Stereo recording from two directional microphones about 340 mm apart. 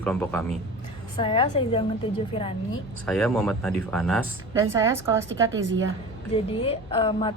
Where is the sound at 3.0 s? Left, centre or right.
Centre.